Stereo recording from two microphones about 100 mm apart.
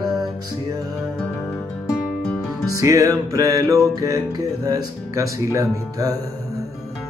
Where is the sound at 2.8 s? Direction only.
30° right (ahead or behind).